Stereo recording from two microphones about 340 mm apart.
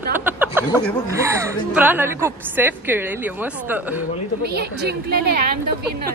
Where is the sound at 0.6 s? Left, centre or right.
Centre.